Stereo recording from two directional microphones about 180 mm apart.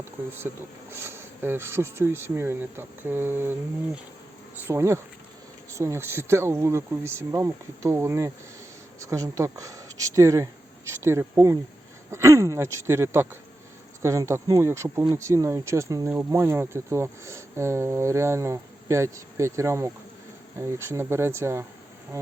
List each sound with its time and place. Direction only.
0.0 s speech: 10° right (ahead or behind)
4.6 s speech: 15° right (ahead or behind)
22.1 s insect: 15° right (ahead or behind)